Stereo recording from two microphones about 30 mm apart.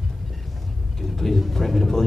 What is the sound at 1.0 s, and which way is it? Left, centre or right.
Vehicle, centre.